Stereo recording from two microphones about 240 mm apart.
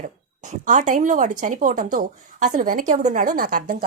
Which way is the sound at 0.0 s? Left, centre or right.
Right.